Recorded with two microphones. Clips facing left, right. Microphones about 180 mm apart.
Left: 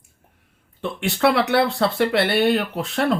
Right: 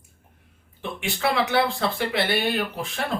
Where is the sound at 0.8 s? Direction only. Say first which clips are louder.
Left 7 dB; 65° left (ahead or behind).